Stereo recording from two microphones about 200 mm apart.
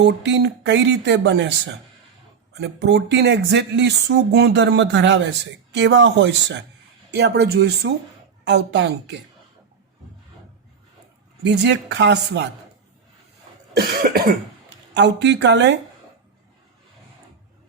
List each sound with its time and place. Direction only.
0.0 s speech: 60° right (ahead or behind)
11.4 s speech: 60° right (ahead or behind)
13.7 s cough: 50° right (ahead or behind)
14.9 s speech: 60° right (ahead or behind)